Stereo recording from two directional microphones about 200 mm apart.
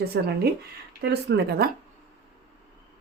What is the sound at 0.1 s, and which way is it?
A woman's voice, 55° right (ahead or behind).